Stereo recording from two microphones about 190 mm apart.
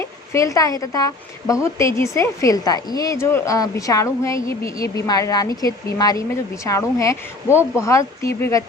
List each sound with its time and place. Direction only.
0.0 s a woman's voice: 15° left (ahead or behind)